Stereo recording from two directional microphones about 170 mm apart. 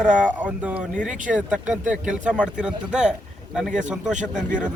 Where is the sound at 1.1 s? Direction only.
50° right (ahead or behind).